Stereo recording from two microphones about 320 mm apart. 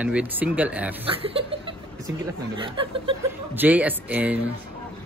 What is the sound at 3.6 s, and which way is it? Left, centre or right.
Speech, centre.